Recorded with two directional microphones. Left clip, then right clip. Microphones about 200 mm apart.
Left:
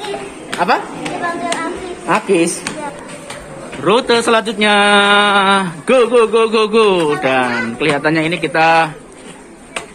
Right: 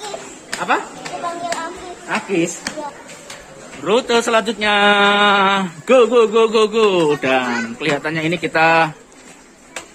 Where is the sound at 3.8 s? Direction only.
Centre (ahead or behind).